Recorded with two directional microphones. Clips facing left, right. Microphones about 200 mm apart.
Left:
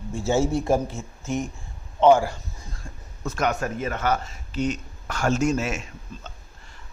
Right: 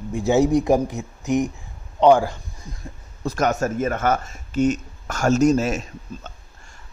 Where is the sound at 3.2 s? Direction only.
40° right (ahead or behind).